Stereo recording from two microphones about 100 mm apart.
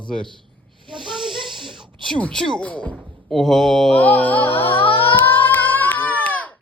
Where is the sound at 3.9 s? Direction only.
15° left (ahead or behind).